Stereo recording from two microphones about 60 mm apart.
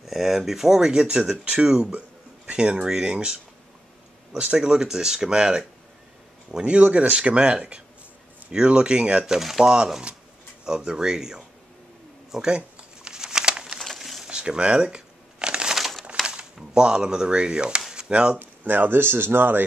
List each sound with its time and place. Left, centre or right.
0.0 s speech: centre
4.5 s speech: centre
12.3 s crumpling: centre
13.7 s a sound: centre
14.3 s shuffling cards: centre
15.7 s crumpling: centre
16.5 s speech: centre
18.4 s speech: right